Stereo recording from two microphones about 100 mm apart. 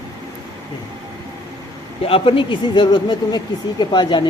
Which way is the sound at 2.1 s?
65° left (ahead or behind).